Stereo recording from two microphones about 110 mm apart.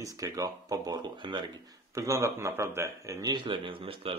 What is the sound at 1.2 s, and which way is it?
Speech, 45° right (ahead or behind).